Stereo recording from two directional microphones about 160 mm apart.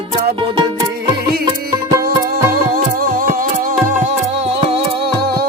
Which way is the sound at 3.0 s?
60° right (ahead or behind).